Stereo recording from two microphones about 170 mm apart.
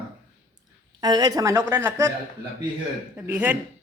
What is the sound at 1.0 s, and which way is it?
A woman's voice, 25° right (ahead or behind).